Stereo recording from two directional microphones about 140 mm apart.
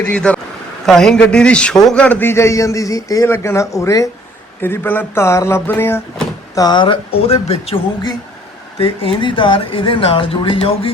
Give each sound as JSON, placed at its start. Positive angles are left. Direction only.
{"t": 0.0, "sound": "a man's voice", "side_deg": 10}
{"t": 6.6, "sound": "speech", "side_deg": 30}
{"t": 8.8, "sound": "speech", "side_deg": 40}